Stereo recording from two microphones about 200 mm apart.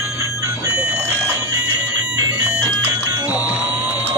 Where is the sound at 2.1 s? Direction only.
10° right (ahead or behind).